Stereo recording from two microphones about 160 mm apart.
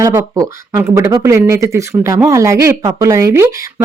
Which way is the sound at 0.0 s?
20° right (ahead or behind).